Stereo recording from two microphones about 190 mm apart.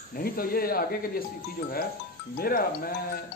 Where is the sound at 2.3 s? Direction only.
50° left (ahead or behind).